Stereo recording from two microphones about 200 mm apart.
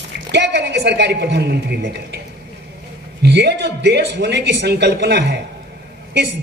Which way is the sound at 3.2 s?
60° right (ahead or behind).